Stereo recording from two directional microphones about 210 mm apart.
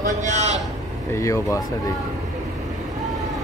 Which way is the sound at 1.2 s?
15° left (ahead or behind).